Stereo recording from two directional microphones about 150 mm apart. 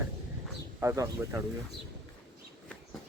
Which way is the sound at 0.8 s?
20° right (ahead or behind).